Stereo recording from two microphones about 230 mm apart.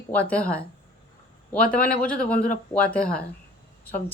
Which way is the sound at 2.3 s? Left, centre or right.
Left.